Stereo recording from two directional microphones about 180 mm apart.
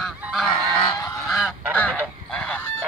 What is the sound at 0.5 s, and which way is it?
Goose, 30° left (ahead or behind).